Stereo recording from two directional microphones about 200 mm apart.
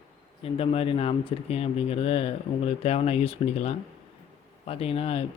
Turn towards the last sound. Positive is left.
turn(degrees=30)  # may be behind; listen again after turning